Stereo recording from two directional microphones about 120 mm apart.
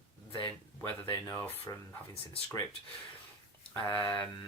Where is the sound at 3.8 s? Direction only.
15° left (ahead or behind).